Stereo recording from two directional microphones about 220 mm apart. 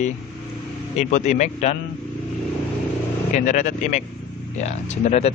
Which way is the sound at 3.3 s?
35° left (ahead or behind).